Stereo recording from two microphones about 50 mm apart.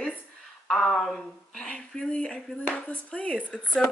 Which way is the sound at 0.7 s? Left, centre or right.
Centre.